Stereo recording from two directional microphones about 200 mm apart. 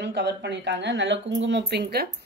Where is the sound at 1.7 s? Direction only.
55° right (ahead or behind).